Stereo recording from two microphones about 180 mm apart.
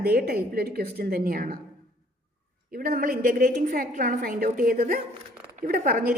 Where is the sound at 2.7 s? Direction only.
55° right (ahead or behind).